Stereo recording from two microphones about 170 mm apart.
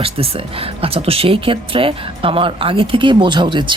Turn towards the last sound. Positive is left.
turn(degrees=-25)  # may be behind; listen again after turning